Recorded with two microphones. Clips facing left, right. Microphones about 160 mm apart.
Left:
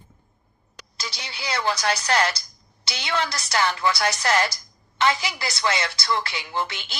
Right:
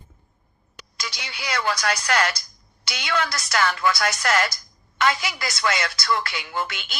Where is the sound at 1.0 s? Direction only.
30° left (ahead or behind).